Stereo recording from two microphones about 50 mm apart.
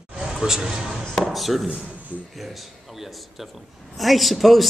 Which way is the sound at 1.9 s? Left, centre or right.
Right.